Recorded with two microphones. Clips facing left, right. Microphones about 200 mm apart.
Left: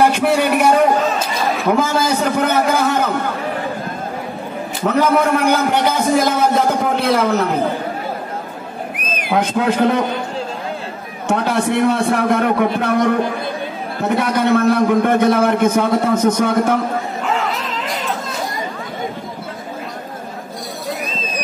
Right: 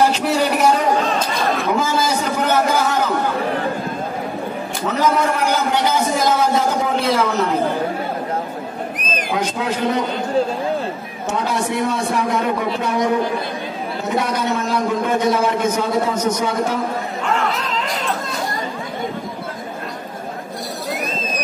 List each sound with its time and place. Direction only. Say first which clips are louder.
0.0 s a man's voice: left 2 dB; 55° left (ahead or behind)
4.8 s a man's voice: left 3 dB; 55° left (ahead or behind)
9.0 s a sound: right 1 dB; 10° left (ahead or behind)
9.3 s a man's voice: left 6 dB; 55° left (ahead or behind)
11.2 s a man's voice: left 4 dB; 55° left (ahead or behind)
17.2 s a sound: right 3 dB; centre (ahead or behind)